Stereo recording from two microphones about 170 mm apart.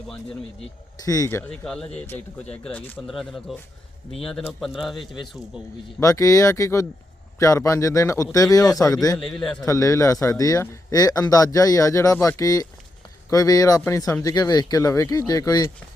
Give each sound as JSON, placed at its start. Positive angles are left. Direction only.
{"t": 1.0, "sound": "a man's voice", "side_deg": 20}
{"t": 6.0, "sound": "speech", "side_deg": 20}
{"t": 9.1, "sound": "a man's voice", "side_deg": 0}
{"t": 9.6, "sound": "speech", "side_deg": 15}